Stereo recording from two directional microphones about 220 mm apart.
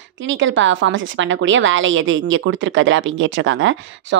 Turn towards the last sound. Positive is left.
turn(degrees=-55)  # may be behind; listen again after turning